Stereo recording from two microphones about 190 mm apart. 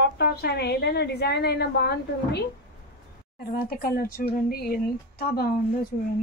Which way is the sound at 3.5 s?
50° left (ahead or behind).